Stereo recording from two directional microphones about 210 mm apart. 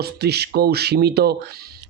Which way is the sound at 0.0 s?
50° right (ahead or behind).